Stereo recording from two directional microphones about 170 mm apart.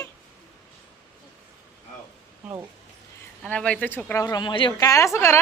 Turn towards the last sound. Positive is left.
turn(degrees=15)  # may be behind; listen again after turning